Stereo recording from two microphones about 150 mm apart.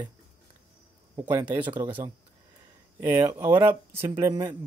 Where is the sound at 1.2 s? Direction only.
10° right (ahead or behind).